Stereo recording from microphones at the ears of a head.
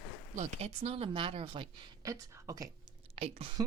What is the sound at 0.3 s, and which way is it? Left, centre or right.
Speech, right.